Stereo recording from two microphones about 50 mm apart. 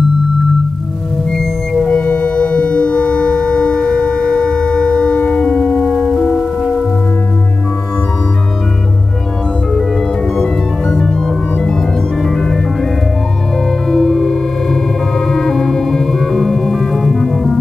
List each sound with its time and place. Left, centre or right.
1.4 s music: centre
1.9 s music: left
5.9 s music: centre
10.3 s music: centre
13.8 s music: centre